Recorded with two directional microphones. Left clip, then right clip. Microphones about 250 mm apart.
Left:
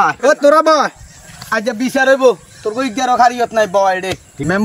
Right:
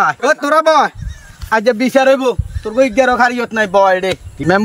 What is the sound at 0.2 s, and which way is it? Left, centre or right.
Speech, right.